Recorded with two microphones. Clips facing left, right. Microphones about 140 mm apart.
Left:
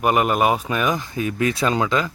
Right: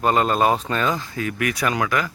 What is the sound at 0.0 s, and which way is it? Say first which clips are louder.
Speech: even; 15° left (ahead or behind).